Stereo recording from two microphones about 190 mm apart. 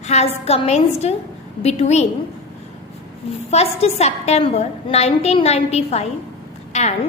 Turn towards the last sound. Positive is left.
turn(degrees=35)  # may be behind; listen again after turning